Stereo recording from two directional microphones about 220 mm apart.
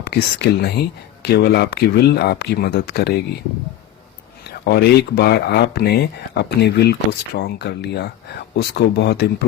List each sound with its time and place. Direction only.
0.0 s speech: 50° left (ahead or behind)
4.6 s speech: 45° left (ahead or behind)